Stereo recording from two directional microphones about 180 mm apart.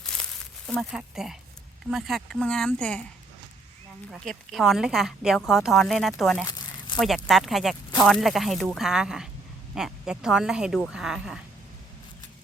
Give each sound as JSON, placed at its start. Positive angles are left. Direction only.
{"t": 0.0, "sound": "crumpling", "side_deg": 5}
{"t": 0.7, "sound": "a woman's voice", "side_deg": 0}
{"t": 4.1, "sound": "a woman's voice", "side_deg": 0}
{"t": 6.4, "sound": "crumpling", "side_deg": 20}
{"t": 7.3, "sound": "a woman's voice", "side_deg": 0}